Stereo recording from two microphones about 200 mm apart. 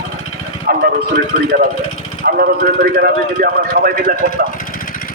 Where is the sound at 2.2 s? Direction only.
50° right (ahead or behind).